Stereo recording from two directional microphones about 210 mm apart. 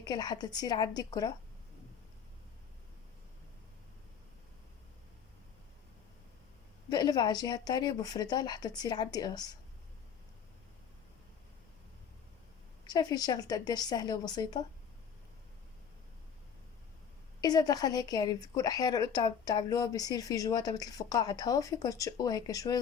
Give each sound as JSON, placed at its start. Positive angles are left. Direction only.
{"t": 0.0, "sound": "speech", "side_deg": 20}
{"t": 6.9, "sound": "speech", "side_deg": 20}
{"t": 12.9, "sound": "speech", "side_deg": 20}
{"t": 17.4, "sound": "a woman's voice", "side_deg": 15}